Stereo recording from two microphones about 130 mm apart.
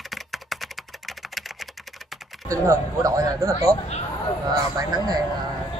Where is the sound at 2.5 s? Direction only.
20° right (ahead or behind).